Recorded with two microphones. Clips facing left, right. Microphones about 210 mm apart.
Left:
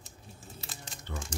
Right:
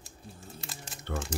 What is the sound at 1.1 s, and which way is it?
Speech, 65° right (ahead or behind).